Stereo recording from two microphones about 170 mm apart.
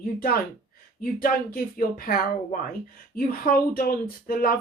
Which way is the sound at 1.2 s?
60° left (ahead or behind).